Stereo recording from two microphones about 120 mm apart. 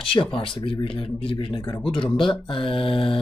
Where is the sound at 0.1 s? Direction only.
45° left (ahead or behind).